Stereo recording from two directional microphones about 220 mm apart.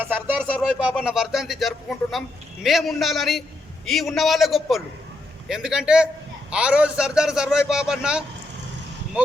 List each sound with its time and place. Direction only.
0.0 s speech: 10° right (ahead or behind)